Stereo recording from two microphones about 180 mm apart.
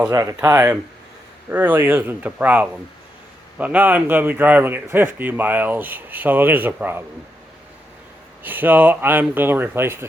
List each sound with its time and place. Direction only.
0.1 s a man's voice: 20° right (ahead or behind)
8.4 s a man's voice: 10° right (ahead or behind)